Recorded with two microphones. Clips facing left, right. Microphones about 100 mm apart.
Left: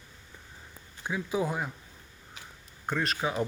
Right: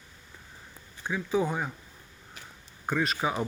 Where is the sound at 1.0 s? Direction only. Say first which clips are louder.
Right 2 dB; 5° left (ahead or behind).